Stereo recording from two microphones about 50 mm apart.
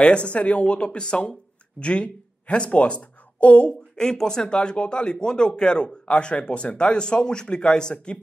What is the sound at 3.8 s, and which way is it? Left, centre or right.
Speech, centre.